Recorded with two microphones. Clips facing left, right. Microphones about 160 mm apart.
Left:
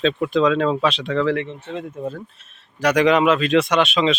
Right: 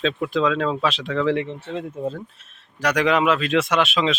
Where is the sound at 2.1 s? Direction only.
Centre (ahead or behind).